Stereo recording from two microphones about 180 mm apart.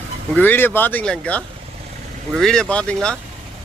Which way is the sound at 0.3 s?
10° left (ahead or behind).